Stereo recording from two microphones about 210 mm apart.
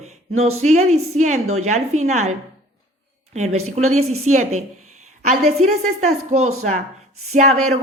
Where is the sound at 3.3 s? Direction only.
30° right (ahead or behind).